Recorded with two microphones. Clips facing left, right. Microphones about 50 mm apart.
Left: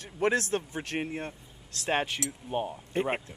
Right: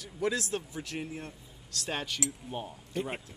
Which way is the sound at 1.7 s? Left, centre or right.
Left.